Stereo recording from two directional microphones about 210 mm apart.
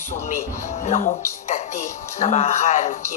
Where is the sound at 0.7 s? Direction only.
35° left (ahead or behind).